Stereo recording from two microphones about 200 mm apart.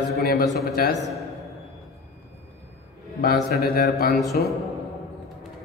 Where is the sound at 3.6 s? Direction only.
50° left (ahead or behind).